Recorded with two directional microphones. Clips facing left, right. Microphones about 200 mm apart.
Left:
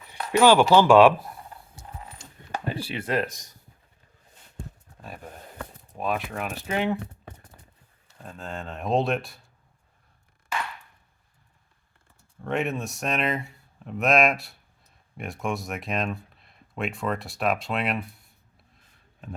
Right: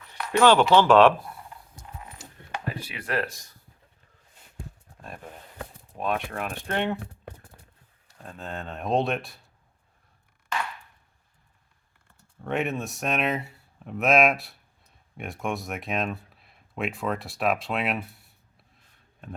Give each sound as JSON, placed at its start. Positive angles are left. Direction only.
{"t": 0.3, "sound": "speech", "side_deg": 10}
{"t": 2.6, "sound": "speech", "side_deg": 30}
{"t": 6.0, "sound": "speech", "side_deg": 0}
{"t": 8.2, "sound": "speech", "side_deg": 0}
{"t": 12.4, "sound": "speech", "side_deg": 0}